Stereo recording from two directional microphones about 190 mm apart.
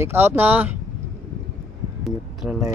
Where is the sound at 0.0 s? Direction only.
10° right (ahead or behind).